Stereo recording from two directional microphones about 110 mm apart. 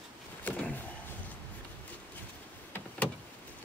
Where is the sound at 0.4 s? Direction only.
15° left (ahead or behind).